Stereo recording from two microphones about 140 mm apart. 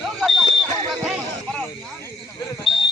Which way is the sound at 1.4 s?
5° left (ahead or behind).